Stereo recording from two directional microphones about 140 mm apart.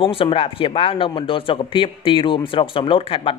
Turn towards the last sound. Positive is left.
turn(degrees=40)  # may be behind; listen again after turning